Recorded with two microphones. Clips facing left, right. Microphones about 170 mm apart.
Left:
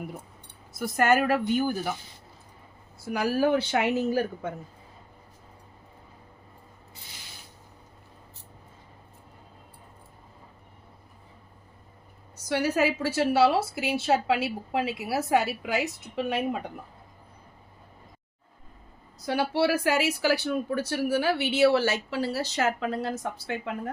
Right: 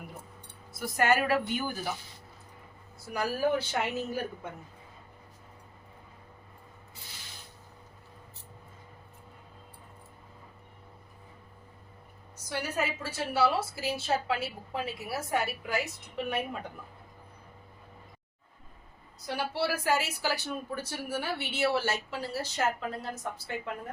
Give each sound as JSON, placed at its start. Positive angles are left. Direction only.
{"t": 0.8, "sound": "a woman's voice", "side_deg": 50}
{"t": 3.1, "sound": "speech", "side_deg": 75}
{"t": 12.5, "sound": "speech", "side_deg": 80}
{"t": 19.5, "sound": "speech", "side_deg": 80}